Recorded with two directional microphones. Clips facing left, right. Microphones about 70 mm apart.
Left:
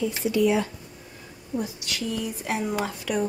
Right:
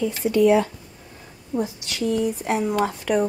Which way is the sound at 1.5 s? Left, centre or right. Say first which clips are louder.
Right 4 dB; right.